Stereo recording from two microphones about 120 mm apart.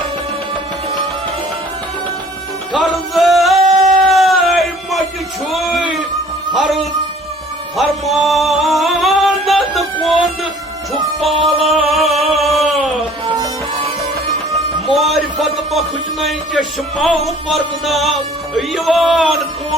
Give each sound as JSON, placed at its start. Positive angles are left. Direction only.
{"t": 2.7, "sound": "music", "side_deg": 0}
{"t": 5.5, "sound": "a sound", "side_deg": 0}
{"t": 6.5, "sound": "a man's voice", "side_deg": 0}
{"t": 7.8, "sound": "music", "side_deg": 0}
{"t": 11.4, "sound": "music", "side_deg": 0}
{"t": 12.4, "sound": "a sound", "side_deg": 0}
{"t": 13.2, "sound": "music", "side_deg": -35}
{"t": 14.9, "sound": "a sound", "side_deg": 0}
{"t": 16.2, "sound": "speech", "side_deg": 0}